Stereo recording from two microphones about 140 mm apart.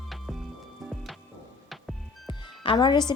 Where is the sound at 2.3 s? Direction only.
35° left (ahead or behind).